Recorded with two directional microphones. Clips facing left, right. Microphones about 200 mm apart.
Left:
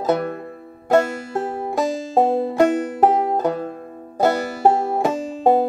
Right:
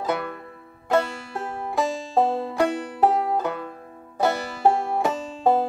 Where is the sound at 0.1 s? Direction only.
45° left (ahead or behind).